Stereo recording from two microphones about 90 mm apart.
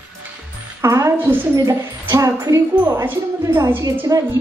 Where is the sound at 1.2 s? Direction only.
20° right (ahead or behind).